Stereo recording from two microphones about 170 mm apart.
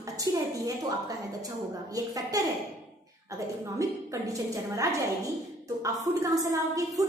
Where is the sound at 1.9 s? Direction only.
20° right (ahead or behind).